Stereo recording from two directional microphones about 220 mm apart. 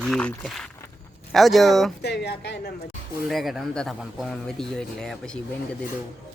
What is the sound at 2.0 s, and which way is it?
Speech, 50° left (ahead or behind).